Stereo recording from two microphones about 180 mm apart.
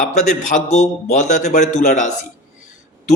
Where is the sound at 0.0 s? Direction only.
45° left (ahead or behind).